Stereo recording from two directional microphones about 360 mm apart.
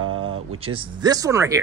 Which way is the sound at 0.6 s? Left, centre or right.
Centre.